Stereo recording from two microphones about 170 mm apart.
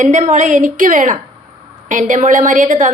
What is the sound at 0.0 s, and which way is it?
A woman's voice, 50° right (ahead or behind).